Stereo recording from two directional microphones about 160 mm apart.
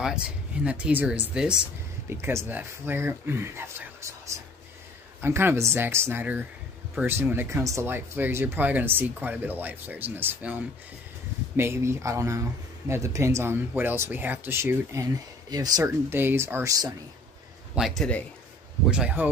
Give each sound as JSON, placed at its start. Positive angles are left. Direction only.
{"t": 0.0, "sound": "speech", "side_deg": -5}
{"t": 17.7, "sound": "speech", "side_deg": 0}
{"t": 18.9, "sound": "speech", "side_deg": -5}